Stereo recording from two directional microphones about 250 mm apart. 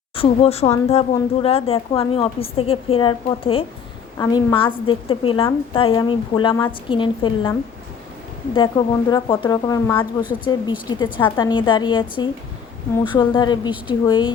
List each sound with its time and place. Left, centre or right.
0.2 s a woman's voice: left
8.5 s a woman's voice: centre